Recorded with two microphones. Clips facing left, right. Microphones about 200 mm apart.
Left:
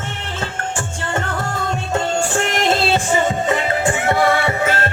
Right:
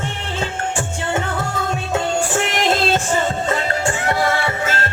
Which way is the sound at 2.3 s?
Centre (ahead or behind).